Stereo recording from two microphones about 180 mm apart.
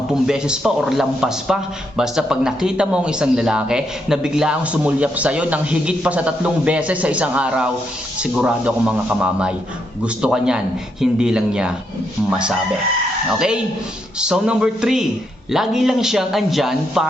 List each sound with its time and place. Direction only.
0.1 s a man's voice: 5° right (ahead or behind)
14.2 s a man's voice: 5° right (ahead or behind)